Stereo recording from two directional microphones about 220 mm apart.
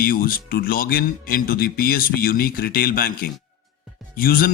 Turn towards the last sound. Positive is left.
turn(degrees=40)  # may be behind; listen again after turning